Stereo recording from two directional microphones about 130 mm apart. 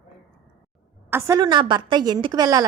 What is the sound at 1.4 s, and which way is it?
A woman's voice, 40° right (ahead or behind).